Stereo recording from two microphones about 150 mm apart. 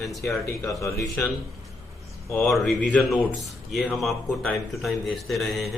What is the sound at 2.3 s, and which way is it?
A man's voice, 5° left (ahead or behind).